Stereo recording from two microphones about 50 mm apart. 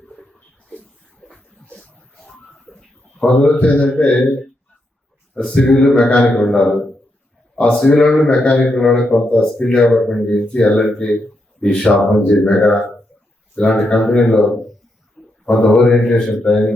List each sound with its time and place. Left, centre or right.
1.3 s a sound: left
3.2 s speech: centre
5.3 s a man's voice: centre
5.6 s speech: left
6.1 s a man's voice: left; by 10.2 s centre
10.2 s speech: left
14.0 s speech: centre
15.4 s a man's voice: centre